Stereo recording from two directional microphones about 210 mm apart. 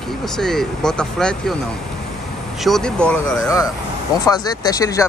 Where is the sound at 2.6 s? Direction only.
5° left (ahead or behind).